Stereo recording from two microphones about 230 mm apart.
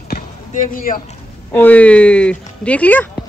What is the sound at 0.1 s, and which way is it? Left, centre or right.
Basketball bounce, left.